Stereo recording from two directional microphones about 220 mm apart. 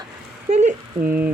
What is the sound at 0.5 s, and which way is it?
Speech, 35° right (ahead or behind).